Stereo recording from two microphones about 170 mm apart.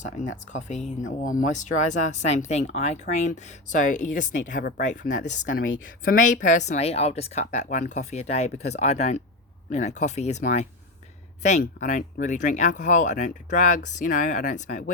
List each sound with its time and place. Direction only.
0.0 s speech: 45° left (ahead or behind)